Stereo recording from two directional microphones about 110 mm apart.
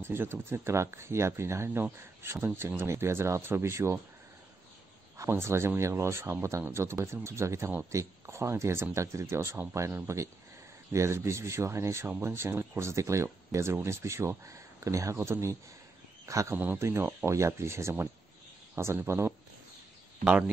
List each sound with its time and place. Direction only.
0.0 s speech: 20° right (ahead or behind)
5.1 s speech: 25° right (ahead or behind)